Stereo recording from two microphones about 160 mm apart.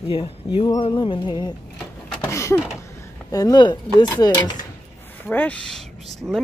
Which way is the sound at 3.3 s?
25° left (ahead or behind).